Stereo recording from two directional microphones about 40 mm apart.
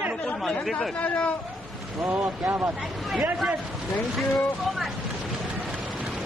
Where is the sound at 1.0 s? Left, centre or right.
Left.